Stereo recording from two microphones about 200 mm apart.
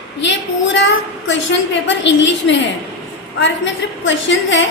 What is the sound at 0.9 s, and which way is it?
A woman's voice, 65° left (ahead or behind).